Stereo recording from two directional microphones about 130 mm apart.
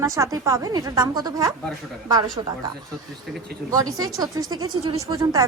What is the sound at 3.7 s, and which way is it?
Speech, 30° right (ahead or behind).